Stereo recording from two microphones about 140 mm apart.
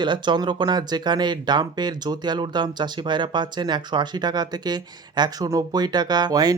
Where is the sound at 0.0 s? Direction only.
35° right (ahead or behind).